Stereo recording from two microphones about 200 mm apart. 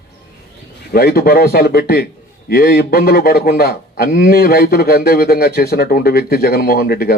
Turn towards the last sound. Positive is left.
turn(degrees=50)  # may be behind; listen again after turning